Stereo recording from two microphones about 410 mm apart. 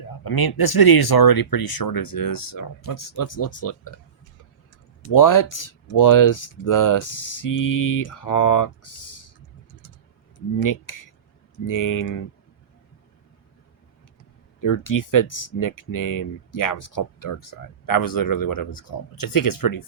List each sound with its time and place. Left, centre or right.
0.3 s speech: left
5.1 s speech: left
10.6 s speech: left
14.6 s speech: left